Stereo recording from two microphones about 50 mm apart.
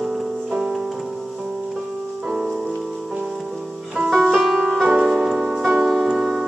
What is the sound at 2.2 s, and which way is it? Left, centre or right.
Music, centre.